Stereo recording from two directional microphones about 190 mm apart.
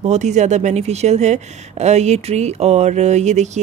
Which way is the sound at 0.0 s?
35° right (ahead or behind).